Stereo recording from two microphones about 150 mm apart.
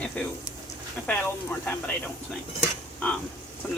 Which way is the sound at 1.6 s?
10° left (ahead or behind).